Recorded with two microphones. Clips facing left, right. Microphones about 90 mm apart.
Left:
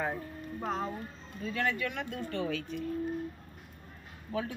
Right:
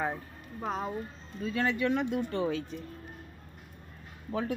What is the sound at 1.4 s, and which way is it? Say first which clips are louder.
Speech: right 3 dB; 20° right (ahead or behind).